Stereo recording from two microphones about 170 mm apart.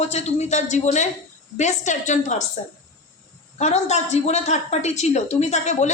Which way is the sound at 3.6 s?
40° left (ahead or behind).